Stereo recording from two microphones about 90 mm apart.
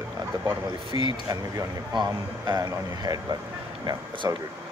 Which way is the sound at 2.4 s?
45° right (ahead or behind).